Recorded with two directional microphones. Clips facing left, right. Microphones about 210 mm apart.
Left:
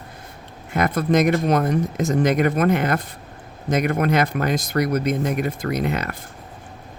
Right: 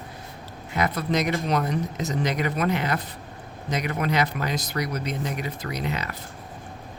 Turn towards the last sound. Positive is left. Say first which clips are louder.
# left 7 dB
turn(degrees=50)  # may be behind; listen again after turning